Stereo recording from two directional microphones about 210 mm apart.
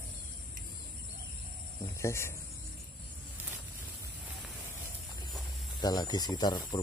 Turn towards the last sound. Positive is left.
turn(degrees=20)  # may be behind; listen again after turning